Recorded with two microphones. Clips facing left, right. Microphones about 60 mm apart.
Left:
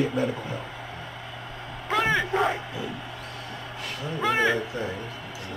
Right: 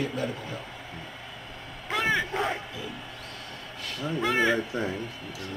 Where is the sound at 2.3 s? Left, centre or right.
Centre.